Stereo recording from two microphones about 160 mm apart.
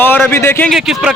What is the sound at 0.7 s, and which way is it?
Speech, centre (ahead or behind).